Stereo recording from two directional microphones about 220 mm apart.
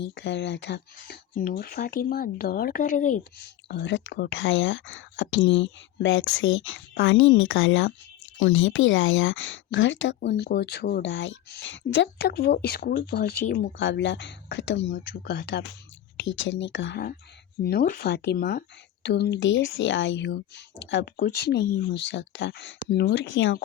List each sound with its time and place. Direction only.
0.1 s speech: 55° left (ahead or behind); by 3.2 s 35° left (ahead or behind)
3.7 s speech: 50° left (ahead or behind)
13.7 s speech: 55° left (ahead or behind)
15.1 s speech: 45° left (ahead or behind)
16.2 s speech: 60° left (ahead or behind)